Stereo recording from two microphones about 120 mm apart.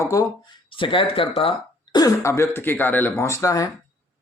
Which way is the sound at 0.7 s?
45° left (ahead or behind).